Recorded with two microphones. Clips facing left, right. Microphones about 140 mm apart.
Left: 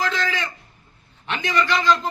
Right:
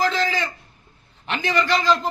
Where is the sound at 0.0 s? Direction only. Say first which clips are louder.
Right 3 dB; 35° right (ahead or behind).